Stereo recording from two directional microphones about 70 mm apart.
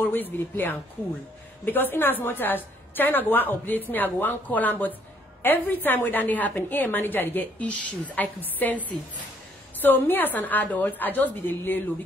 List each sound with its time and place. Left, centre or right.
0.0 s a woman's voice: left